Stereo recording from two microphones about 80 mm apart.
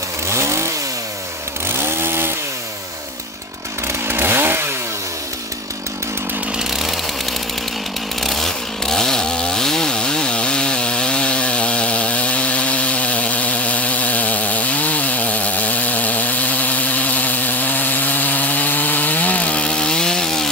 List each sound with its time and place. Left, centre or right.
0.3 s chainsaw: right
1.8 s chainsaw: right
3.8 s chainsaw: right
6.7 s chainsaw: centre
8.2 s chainsaw: centre